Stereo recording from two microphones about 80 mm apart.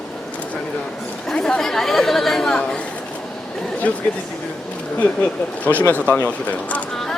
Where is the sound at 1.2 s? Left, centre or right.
Centre.